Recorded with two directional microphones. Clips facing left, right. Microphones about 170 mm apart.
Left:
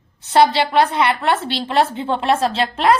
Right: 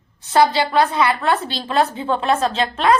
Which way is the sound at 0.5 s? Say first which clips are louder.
Left 1 dB; 25° left (ahead or behind).